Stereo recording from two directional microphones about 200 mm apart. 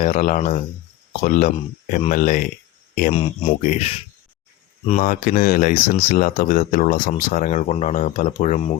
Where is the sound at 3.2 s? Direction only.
30° left (ahead or behind).